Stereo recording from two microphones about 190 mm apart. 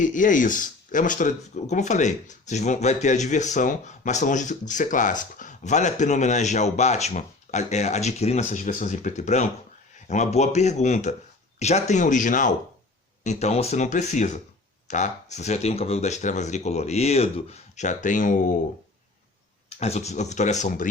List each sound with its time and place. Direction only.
0.0 s speech: 45° left (ahead or behind)
19.8 s speech: 35° left (ahead or behind)